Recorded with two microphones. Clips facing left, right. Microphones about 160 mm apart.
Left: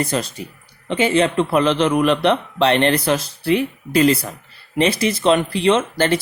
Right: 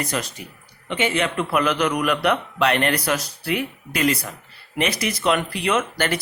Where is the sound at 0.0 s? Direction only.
30° left (ahead or behind).